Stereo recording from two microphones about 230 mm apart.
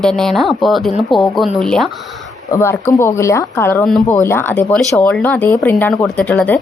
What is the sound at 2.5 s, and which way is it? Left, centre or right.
Speech, centre.